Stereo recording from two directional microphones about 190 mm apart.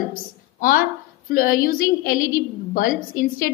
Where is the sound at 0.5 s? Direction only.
45° left (ahead or behind).